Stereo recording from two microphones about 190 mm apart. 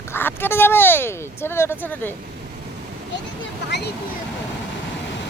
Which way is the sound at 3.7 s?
65° left (ahead or behind).